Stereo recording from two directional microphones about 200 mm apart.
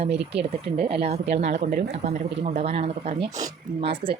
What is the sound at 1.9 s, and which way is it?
Speech, 35° right (ahead or behind).